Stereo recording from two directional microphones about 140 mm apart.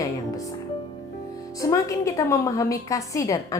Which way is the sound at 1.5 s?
25° left (ahead or behind).